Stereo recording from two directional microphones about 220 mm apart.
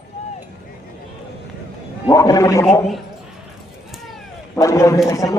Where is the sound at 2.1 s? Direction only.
15° left (ahead or behind).